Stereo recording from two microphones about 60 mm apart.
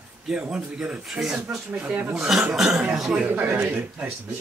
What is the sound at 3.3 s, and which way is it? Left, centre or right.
Speech, right.